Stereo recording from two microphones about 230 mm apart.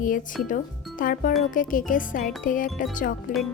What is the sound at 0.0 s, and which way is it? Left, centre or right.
Speech, left.